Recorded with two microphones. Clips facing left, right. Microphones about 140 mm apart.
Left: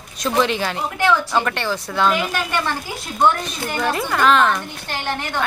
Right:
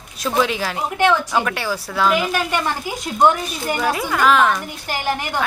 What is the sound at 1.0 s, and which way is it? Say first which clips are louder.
Speech: right 1 dB; 20° right (ahead or behind).